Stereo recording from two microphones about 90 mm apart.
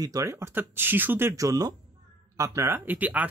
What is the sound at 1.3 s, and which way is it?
Speech, 40° right (ahead or behind).